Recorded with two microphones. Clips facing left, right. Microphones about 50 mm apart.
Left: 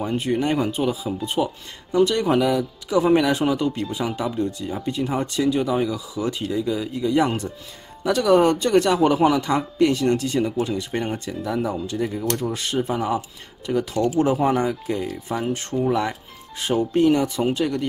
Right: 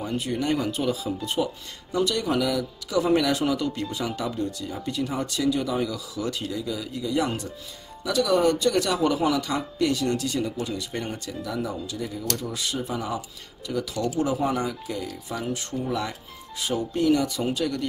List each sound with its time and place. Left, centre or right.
0.0 s speech: left